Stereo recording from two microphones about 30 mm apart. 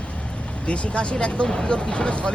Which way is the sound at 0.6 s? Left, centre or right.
Left.